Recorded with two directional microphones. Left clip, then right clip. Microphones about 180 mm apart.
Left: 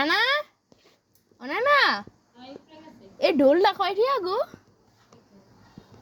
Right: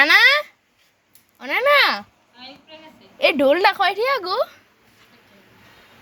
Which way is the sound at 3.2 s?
15° left (ahead or behind).